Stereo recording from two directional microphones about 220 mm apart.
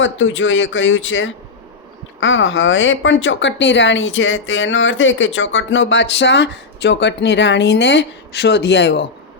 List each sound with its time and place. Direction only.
0.0 s speech: 60° left (ahead or behind)